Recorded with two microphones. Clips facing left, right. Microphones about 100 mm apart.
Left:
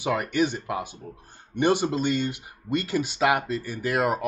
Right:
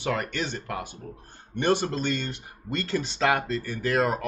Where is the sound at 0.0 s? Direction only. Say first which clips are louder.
Left 5 dB; 15° left (ahead or behind).